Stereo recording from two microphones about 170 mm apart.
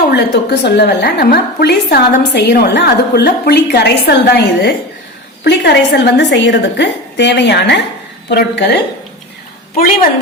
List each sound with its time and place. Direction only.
0.1 s a woman's voice: 85° left